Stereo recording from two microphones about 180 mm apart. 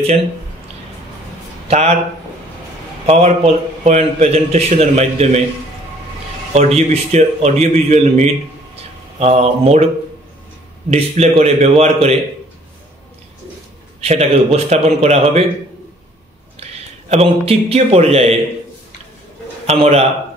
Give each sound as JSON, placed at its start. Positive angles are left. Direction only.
{"t": 1.7, "sound": "a man's voice", "side_deg": -35}
{"t": 3.1, "sound": "a man's voice", "side_deg": -35}
{"t": 6.5, "sound": "a man's voice", "side_deg": -35}
{"t": 10.9, "sound": "a man's voice", "side_deg": -35}
{"t": 14.0, "sound": "a man's voice", "side_deg": -35}
{"t": 17.1, "sound": "a man's voice", "side_deg": -35}
{"t": 19.6, "sound": "a man's voice", "side_deg": -35}